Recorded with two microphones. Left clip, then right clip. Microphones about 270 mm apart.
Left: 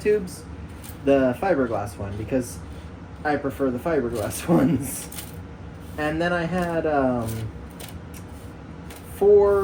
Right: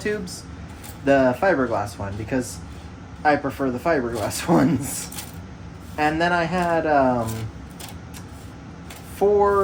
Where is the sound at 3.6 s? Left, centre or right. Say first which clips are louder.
Right 2 dB; right.